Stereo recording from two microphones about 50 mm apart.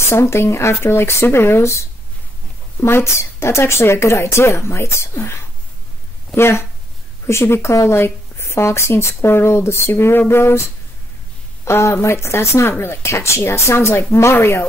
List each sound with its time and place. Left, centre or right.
0.1 s speech: left